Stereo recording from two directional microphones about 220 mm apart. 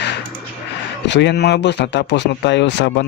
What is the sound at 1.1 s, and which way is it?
Speech, 50° left (ahead or behind).